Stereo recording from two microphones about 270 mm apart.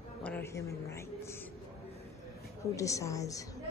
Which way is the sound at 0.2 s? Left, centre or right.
Centre.